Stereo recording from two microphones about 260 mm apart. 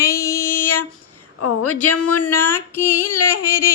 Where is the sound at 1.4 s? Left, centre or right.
Left.